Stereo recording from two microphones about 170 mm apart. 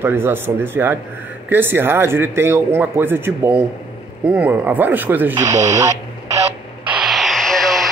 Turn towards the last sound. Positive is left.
turn(degrees=0)  # may be behind; listen again after turning